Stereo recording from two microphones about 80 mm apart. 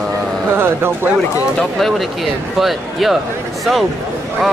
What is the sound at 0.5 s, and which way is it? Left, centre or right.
Speech, right.